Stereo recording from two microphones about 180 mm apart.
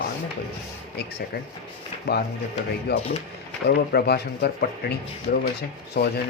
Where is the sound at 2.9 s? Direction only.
65° left (ahead or behind).